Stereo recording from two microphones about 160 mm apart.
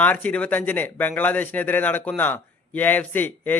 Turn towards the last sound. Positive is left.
turn(degrees=10)  # may be behind; listen again after turning